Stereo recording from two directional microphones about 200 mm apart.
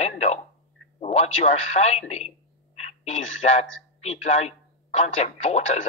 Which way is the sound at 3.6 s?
30° left (ahead or behind).